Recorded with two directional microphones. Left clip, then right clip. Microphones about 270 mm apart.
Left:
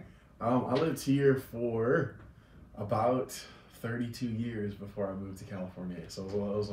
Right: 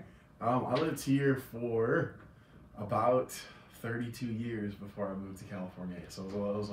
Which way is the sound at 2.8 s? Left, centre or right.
Centre.